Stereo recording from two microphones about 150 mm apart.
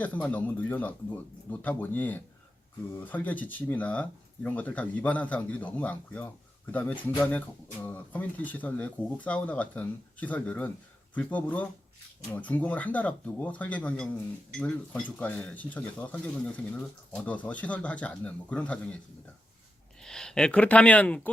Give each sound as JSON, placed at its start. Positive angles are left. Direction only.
{"t": 0.0, "sound": "speech", "side_deg": 10}
{"t": 20.0, "sound": "speech", "side_deg": 5}